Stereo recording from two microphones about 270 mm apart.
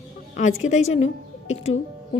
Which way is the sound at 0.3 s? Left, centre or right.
Left.